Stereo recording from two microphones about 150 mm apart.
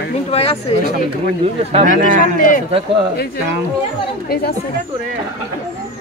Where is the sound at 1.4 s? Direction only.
40° right (ahead or behind).